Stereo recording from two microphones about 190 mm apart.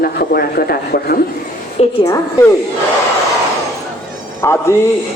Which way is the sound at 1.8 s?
35° left (ahead or behind).